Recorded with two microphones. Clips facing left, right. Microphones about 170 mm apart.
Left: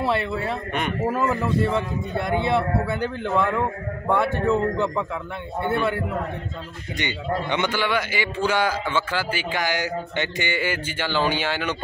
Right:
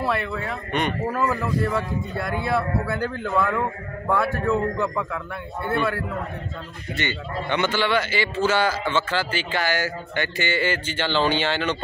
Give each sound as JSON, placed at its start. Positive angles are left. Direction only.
{"t": 0.0, "sound": "a man's voice", "side_deg": 25}
{"t": 7.0, "sound": "a man's voice", "side_deg": 15}